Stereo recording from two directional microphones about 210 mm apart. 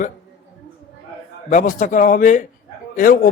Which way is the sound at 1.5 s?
35° left (ahead or behind).